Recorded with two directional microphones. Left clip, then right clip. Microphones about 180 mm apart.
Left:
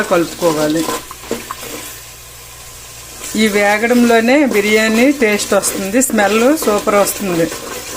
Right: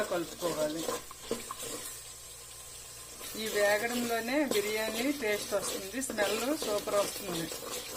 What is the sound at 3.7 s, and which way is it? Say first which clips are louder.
Speech: left 19 dB; 50° left (ahead or behind).